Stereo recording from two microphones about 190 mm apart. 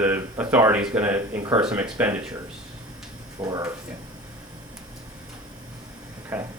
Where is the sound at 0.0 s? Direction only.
10° right (ahead or behind).